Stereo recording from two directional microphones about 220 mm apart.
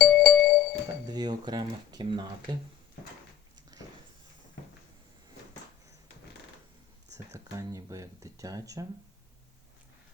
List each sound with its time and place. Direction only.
0.0 s music: centre (ahead or behind)
1.0 s speech: 20° right (ahead or behind)
3.7 s a sound: 15° right (ahead or behind)
7.5 s speech: 15° right (ahead or behind)